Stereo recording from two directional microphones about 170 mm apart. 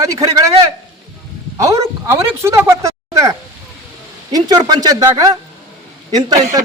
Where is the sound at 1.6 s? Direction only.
20° right (ahead or behind).